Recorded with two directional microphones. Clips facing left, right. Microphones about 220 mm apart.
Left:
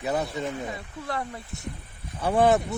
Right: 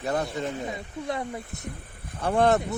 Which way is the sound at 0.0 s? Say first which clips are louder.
Even; 5° left (ahead or behind).